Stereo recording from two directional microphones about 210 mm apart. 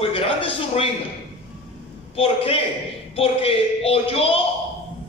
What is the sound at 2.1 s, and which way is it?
A man's voice, 25° left (ahead or behind).